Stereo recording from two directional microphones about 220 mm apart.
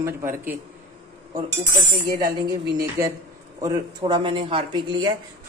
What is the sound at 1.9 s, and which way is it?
Speech, 40° right (ahead or behind).